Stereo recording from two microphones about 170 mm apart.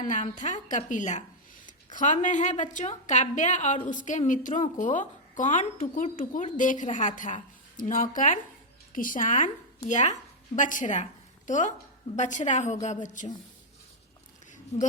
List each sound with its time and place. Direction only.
0.0 s a woman's voice: 50° left (ahead or behind)
1.6 s a sound: 50° left (ahead or behind)
2.2 s a woman's voice: 45° left (ahead or behind)